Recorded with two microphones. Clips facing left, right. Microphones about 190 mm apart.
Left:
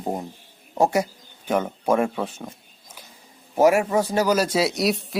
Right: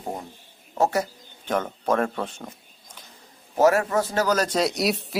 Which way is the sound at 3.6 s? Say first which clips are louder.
Left 2 dB; 10° left (ahead or behind).